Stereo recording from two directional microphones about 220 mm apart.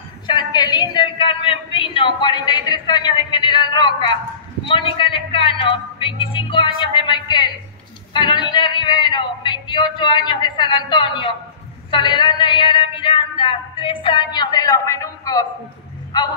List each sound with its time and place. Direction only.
0.3 s a woman's voice: 20° left (ahead or behind)